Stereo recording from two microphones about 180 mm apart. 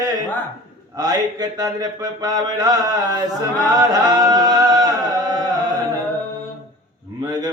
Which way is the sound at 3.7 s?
20° right (ahead or behind).